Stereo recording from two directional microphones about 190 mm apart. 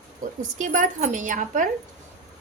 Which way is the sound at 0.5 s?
40° right (ahead or behind).